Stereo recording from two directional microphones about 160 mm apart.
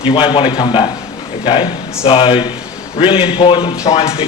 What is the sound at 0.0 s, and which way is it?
Speech, 30° left (ahead or behind).